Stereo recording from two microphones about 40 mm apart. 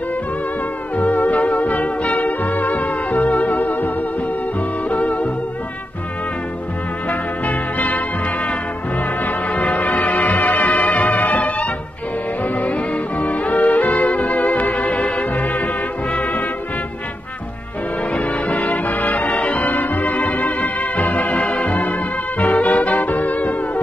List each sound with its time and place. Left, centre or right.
0.9 s music: left
7.1 s music: left
9.5 s music: left
18.1 s music: left